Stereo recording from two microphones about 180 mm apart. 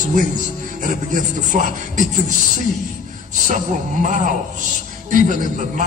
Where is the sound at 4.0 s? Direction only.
45° right (ahead or behind).